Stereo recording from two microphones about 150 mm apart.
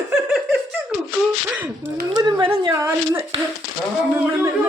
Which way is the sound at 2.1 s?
30° right (ahead or behind).